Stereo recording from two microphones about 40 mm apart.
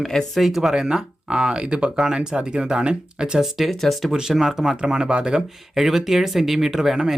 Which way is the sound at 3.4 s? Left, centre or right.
Centre.